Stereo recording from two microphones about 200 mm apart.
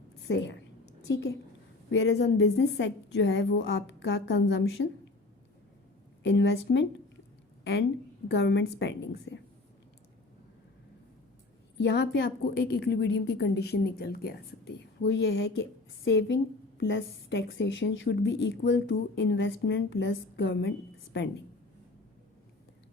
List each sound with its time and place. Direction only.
0.3 s a woman's voice: 60° left (ahead or behind)
1.9 s a woman's voice: 60° left (ahead or behind)
6.2 s a woman's voice: 65° left (ahead or behind)
11.8 s a woman's voice: 60° left (ahead or behind)